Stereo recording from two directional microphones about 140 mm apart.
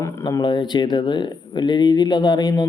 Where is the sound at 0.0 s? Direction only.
25° left (ahead or behind).